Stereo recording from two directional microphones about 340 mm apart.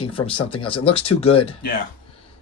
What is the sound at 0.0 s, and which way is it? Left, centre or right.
Speech, centre.